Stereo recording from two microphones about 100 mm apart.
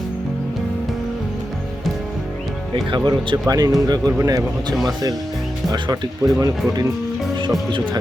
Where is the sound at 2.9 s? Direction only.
50° right (ahead or behind).